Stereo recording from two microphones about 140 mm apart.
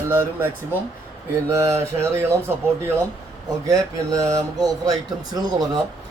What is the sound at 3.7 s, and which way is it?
Speech, 25° right (ahead or behind).